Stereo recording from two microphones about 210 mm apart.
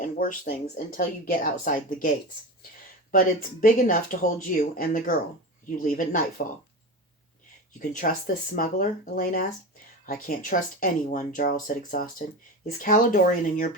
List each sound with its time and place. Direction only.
0.0 s speech: 40° left (ahead or behind)
7.8 s speech: 40° left (ahead or behind)